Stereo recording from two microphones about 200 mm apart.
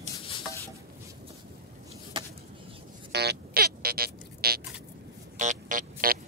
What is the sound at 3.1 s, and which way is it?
Music, 50° right (ahead or behind).